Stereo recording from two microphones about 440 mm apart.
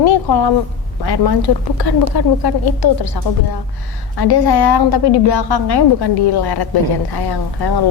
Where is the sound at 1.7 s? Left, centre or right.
Left.